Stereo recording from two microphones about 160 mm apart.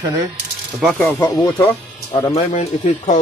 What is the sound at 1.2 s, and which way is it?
Speech, 20° left (ahead or behind).